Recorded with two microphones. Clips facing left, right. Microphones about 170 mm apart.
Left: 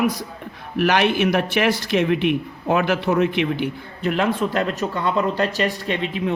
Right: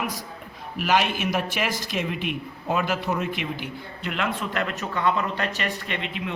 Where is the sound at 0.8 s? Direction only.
70° left (ahead or behind).